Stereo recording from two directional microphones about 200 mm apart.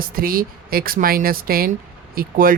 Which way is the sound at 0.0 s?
45° right (ahead or behind).